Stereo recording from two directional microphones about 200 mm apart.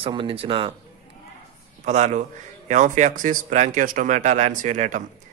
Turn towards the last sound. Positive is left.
turn(degrees=-40)  # may be behind; listen again after turning